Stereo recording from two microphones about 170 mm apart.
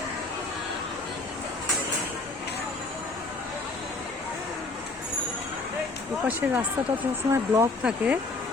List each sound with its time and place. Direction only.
6.2 s speech: 10° right (ahead or behind)